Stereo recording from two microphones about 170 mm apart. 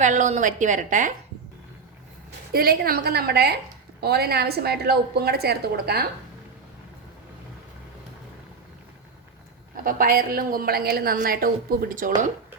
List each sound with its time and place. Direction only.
0.0 s a woman's voice: 45° right (ahead or behind)
2.5 s a woman's voice: 65° right (ahead or behind)
9.7 s a woman's voice: 55° right (ahead or behind)